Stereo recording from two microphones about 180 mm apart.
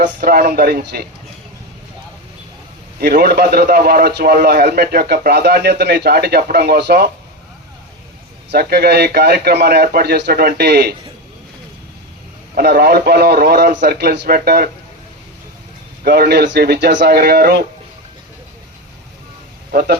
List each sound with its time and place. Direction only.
0.2 s a man's voice: 60° right (ahead or behind)
3.0 s a man's voice: 60° right (ahead or behind)
8.4 s a man's voice: 60° right (ahead or behind)
12.5 s a man's voice: 60° right (ahead or behind)
16.0 s a man's voice: 60° right (ahead or behind)